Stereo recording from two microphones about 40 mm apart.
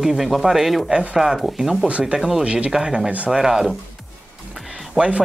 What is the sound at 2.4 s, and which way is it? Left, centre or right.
Speech, right.